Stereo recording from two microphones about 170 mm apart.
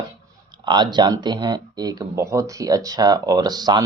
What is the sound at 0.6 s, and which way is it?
Speech, 25° right (ahead or behind).